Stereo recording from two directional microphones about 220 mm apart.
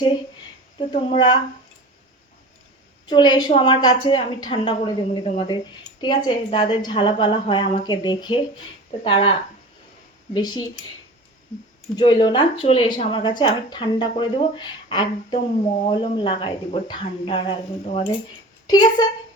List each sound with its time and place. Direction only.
0.8 s speech: 25° left (ahead or behind)
3.1 s speech: 20° left (ahead or behind)
10.3 s speech: 20° left (ahead or behind)
11.9 s speech: 20° left (ahead or behind)